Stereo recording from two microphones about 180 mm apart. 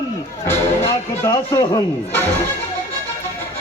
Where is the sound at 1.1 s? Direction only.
15° left (ahead or behind).